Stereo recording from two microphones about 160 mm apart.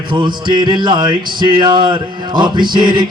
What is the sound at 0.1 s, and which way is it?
Music, 30° right (ahead or behind).